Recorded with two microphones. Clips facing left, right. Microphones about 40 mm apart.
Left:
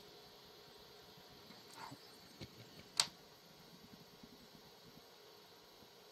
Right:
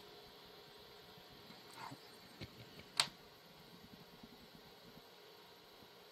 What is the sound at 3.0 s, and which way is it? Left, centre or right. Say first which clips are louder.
Tick-tock: right 2 dB; right.